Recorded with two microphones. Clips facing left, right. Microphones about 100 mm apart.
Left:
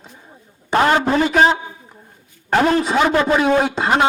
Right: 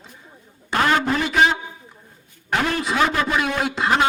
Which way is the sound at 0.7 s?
30° left (ahead or behind).